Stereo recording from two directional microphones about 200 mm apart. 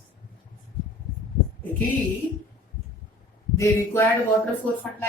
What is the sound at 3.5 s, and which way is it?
Speech, 10° left (ahead or behind).